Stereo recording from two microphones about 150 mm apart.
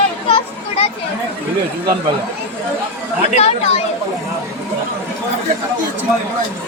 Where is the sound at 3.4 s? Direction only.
45° left (ahead or behind).